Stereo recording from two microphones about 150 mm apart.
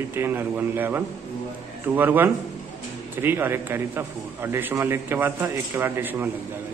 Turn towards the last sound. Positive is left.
turn(degrees=-15)  # may be behind; listen again after turning